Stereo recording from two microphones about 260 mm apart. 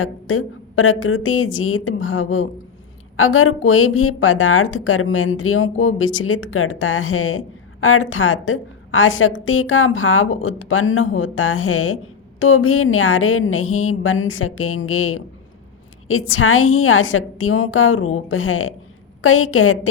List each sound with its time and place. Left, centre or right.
0.0 s a woman's voice: left